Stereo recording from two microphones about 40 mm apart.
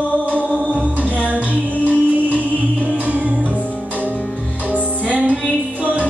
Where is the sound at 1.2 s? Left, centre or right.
Right.